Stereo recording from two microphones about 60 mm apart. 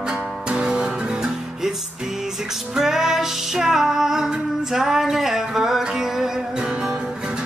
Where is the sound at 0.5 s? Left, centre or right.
Centre.